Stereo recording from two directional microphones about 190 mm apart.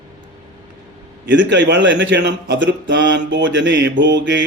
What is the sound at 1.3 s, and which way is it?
Speech, 70° right (ahead or behind).